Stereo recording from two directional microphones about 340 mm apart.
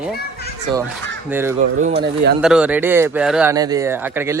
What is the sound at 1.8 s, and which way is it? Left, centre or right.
Speech, right.